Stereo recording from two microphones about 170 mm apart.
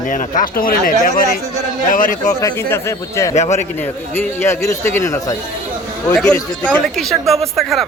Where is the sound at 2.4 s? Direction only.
15° left (ahead or behind).